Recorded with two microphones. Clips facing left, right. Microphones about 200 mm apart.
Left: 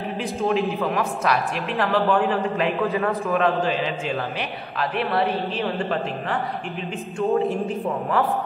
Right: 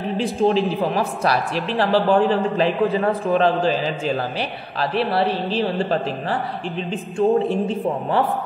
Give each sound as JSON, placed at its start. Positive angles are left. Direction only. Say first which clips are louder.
{"t": 0.2, "sound": "a man's voice", "louder": "right 4 dB", "side_deg": -30}